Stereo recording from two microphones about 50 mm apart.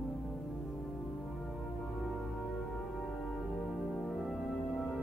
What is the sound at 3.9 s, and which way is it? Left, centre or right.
Music, left.